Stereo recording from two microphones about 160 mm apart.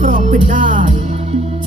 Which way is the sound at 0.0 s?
50° right (ahead or behind).